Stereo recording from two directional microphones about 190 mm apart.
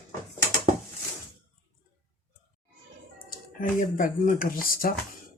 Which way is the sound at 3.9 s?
45° left (ahead or behind).